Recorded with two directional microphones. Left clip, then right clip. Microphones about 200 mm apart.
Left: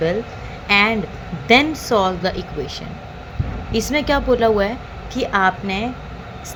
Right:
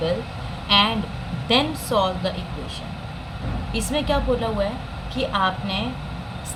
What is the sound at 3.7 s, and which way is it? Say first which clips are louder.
A woman's voice: left 5 dB; 35° left (ahead or behind).